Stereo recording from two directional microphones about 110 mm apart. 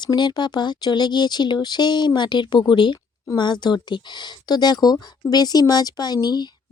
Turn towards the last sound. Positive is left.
turn(degrees=40)  # may be behind; listen again after turning